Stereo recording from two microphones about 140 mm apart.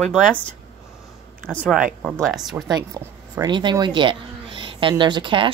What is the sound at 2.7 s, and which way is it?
Speech, 25° right (ahead or behind).